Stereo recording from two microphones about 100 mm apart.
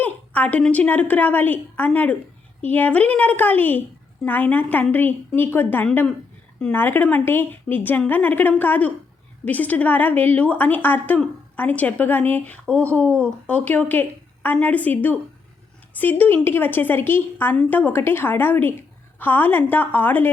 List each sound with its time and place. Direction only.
0.0 s a woman's voice: 15° left (ahead or behind)